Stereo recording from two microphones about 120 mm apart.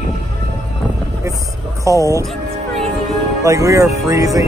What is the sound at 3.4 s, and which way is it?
Speech, 30° right (ahead or behind).